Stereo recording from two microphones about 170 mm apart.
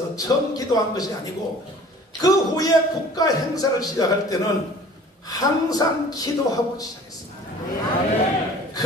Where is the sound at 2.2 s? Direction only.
20° left (ahead or behind).